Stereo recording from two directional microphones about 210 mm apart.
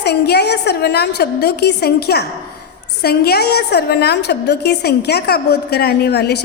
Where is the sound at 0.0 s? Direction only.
50° left (ahead or behind).